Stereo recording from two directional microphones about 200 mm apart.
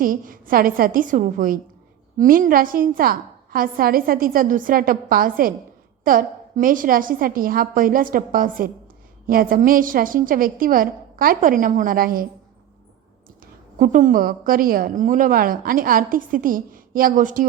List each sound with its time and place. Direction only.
0.0 s a woman's voice: 45° right (ahead or behind)
13.7 s a woman's voice: 40° right (ahead or behind)